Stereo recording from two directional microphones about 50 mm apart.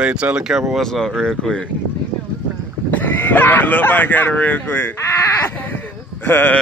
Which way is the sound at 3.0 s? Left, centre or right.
Left.